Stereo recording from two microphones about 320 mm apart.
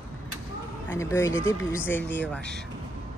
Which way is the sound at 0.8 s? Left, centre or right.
Centre.